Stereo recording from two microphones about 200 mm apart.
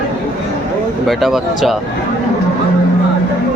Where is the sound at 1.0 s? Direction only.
Centre (ahead or behind).